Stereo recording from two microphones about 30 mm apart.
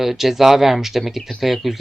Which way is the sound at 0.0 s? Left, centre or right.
Centre.